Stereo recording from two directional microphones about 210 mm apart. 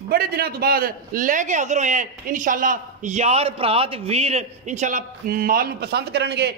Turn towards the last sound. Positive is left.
turn(degrees=-50)  # may be behind; listen again after turning